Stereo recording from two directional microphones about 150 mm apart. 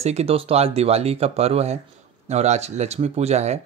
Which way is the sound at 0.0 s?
45° right (ahead or behind).